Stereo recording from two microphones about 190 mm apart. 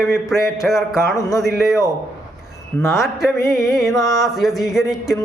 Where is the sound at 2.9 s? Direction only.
Centre (ahead or behind).